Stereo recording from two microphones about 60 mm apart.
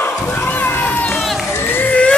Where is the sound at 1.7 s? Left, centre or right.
Left.